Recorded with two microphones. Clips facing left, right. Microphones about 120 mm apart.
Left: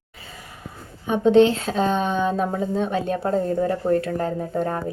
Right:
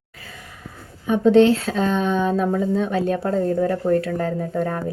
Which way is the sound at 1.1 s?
Centre (ahead or behind).